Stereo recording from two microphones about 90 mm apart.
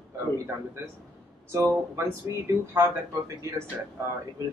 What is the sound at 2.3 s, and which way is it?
Speech, 50° left (ahead or behind).